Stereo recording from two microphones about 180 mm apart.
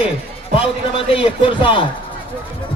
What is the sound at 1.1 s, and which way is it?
Music, 30° left (ahead or behind).